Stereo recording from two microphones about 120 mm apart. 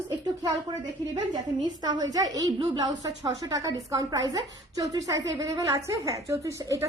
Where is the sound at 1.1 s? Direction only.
35° right (ahead or behind).